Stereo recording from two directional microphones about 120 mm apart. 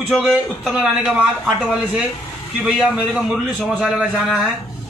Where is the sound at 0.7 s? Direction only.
5° right (ahead or behind).